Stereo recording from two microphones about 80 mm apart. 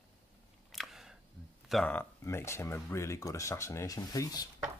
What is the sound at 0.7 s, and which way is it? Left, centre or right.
Camera, centre.